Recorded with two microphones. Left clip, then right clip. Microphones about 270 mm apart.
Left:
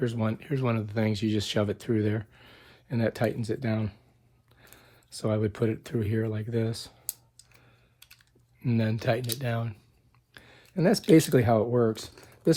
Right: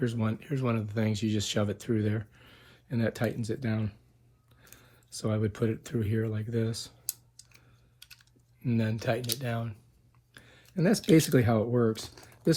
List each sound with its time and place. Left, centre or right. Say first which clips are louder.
0.0 s speech: left 2 dB; left
7.9 s typing: right 3 dB; centre
8.6 s speech: left 3 dB; left